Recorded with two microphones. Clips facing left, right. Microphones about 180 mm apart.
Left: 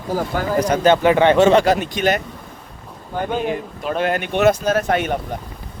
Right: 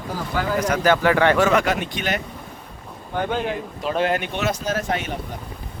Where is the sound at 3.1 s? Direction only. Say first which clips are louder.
Left 2 dB; 10° left (ahead or behind).